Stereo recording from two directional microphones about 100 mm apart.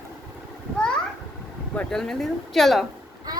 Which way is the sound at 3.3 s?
40° right (ahead or behind).